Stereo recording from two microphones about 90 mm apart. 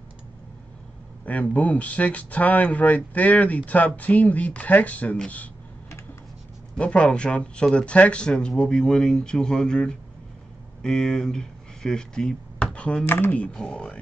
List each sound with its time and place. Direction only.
1.2 s speech: 15° left (ahead or behind)
6.8 s speech: 10° left (ahead or behind)
13.0 s speech: 20° left (ahead or behind)